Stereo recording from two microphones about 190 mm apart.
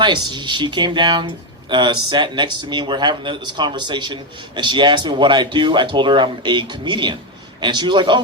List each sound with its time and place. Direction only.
0.0 s speech: 25° right (ahead or behind)